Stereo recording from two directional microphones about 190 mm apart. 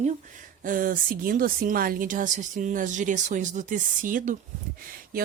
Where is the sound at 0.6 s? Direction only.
45° right (ahead or behind).